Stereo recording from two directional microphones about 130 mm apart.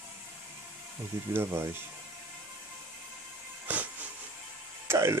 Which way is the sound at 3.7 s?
10° right (ahead or behind).